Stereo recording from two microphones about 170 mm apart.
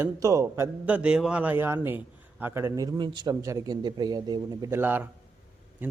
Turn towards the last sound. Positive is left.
turn(degrees=-10)  # may be behind; listen again after turning